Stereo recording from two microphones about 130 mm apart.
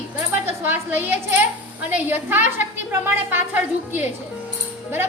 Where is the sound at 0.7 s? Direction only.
15° right (ahead or behind).